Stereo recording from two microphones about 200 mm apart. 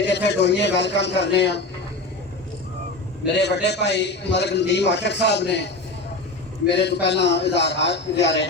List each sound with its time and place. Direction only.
0.1 s a man's voice: 60° left (ahead or behind)
3.3 s a man's voice: 60° left (ahead or behind)
6.7 s a man's voice: 60° left (ahead or behind)